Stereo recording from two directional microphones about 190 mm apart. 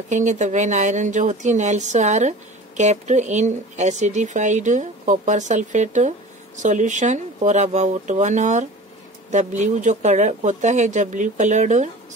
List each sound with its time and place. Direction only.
0.1 s speech: 40° right (ahead or behind)